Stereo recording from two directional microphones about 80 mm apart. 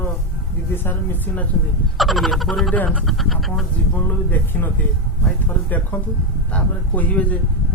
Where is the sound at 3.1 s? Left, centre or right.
Centre.